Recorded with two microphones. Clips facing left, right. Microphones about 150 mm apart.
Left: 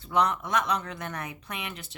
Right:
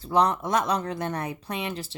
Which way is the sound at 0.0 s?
35° right (ahead or behind).